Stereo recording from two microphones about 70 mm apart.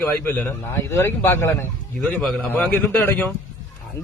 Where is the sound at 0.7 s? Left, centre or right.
Left.